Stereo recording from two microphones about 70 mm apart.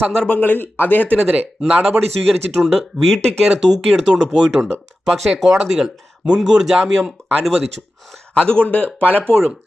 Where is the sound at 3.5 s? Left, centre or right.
Centre.